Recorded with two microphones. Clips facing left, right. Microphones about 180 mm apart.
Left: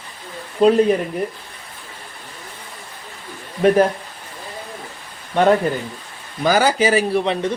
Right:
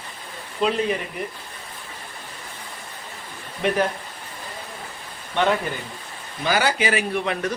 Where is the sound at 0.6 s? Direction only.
40° left (ahead or behind).